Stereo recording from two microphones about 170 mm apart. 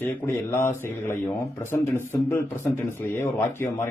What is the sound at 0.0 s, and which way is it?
Speech, 10° left (ahead or behind).